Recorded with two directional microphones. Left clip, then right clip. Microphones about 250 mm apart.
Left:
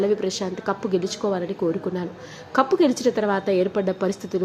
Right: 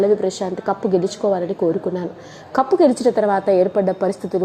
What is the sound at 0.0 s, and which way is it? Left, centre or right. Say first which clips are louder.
A woman's voice: right 5 dB; centre.